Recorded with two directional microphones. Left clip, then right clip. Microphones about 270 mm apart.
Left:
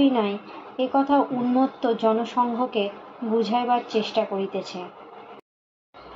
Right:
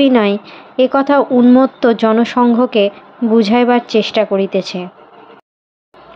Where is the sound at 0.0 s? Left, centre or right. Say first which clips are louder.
Right 10 dB; right.